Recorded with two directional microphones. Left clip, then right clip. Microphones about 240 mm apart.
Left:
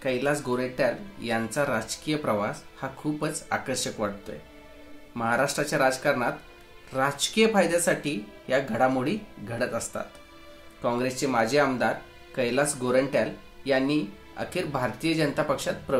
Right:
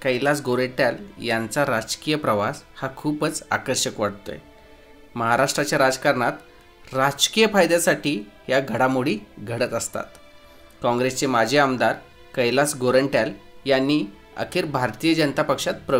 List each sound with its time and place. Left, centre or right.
0.0 s speech: right